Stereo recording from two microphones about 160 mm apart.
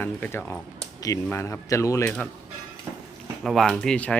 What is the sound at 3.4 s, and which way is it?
Speech, centre (ahead or behind).